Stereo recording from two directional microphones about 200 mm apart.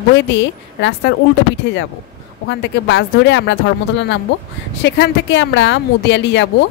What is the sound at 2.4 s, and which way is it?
A woman's voice, 65° left (ahead or behind).